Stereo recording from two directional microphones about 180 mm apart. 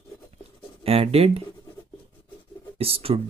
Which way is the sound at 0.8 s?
35° right (ahead or behind).